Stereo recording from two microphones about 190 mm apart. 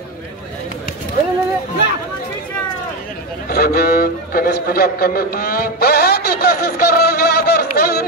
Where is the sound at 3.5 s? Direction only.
55° left (ahead or behind).